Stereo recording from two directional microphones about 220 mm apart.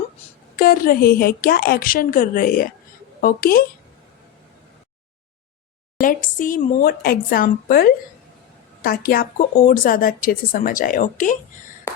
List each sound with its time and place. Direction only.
0.5 s a woman's voice: 40° left (ahead or behind)
6.0 s a woman's voice: 40° left (ahead or behind)